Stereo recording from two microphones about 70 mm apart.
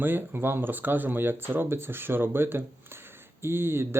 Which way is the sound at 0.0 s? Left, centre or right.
Right.